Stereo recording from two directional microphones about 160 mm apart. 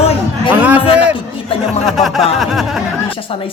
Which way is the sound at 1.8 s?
Centre (ahead or behind).